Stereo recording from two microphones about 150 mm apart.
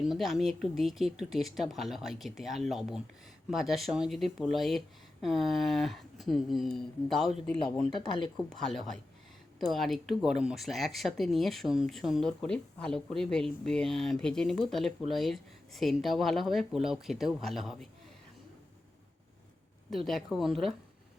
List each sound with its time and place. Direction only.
0.0 s speech: centre (ahead or behind)
7.9 s speech: 30° left (ahead or behind)
8.4 s speech: centre (ahead or behind)
19.9 s speech: centre (ahead or behind)